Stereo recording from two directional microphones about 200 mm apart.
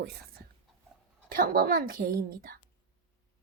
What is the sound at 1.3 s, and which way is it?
Speech, 45° right (ahead or behind).